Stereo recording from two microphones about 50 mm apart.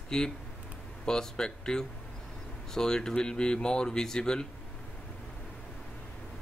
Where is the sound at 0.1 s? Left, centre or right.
Centre.